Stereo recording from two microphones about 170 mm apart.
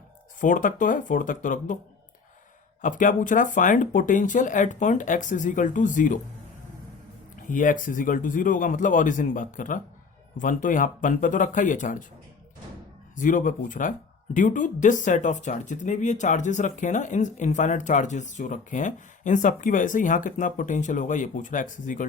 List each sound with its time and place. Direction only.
0.3 s speech: 50° left (ahead or behind)
2.8 s speech: 50° left (ahead or behind)
7.4 s speech: 50° left (ahead or behind)
13.1 s speech: 50° left (ahead or behind)